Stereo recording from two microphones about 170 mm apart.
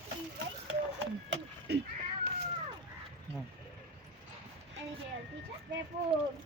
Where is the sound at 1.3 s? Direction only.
85° right.